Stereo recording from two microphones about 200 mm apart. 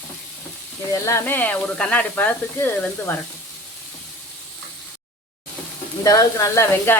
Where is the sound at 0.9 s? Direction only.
15° left (ahead or behind).